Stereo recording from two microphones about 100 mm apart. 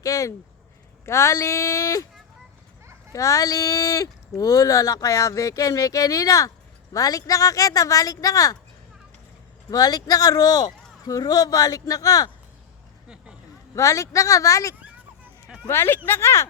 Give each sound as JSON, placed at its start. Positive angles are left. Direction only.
{"t": 0.0, "sound": "a sound", "side_deg": 35}
{"t": 1.0, "sound": "speech", "side_deg": 30}
{"t": 3.1, "sound": "speech", "side_deg": 30}
{"t": 9.6, "sound": "speech", "side_deg": 40}
{"t": 13.7, "sound": "speech", "side_deg": 30}